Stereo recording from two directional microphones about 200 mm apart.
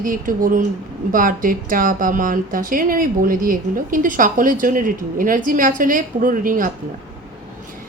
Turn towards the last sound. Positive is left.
turn(degrees=-45)  # may be behind; listen again after turning